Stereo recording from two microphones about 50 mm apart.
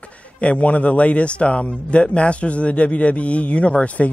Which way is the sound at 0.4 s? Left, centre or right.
Left.